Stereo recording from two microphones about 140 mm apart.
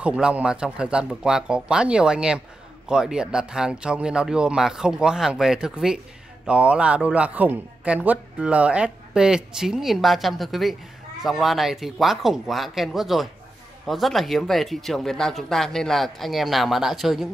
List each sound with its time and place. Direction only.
0.0 s a man's voice: 5° right (ahead or behind)